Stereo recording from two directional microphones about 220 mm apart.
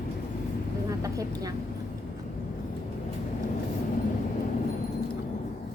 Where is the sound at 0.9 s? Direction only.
15° right (ahead or behind).